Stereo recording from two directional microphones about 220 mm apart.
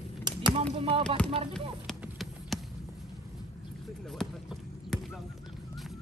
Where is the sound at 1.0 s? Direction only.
5° left (ahead or behind).